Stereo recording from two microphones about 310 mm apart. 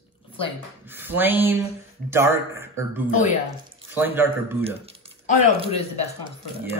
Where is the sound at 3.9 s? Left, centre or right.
Centre.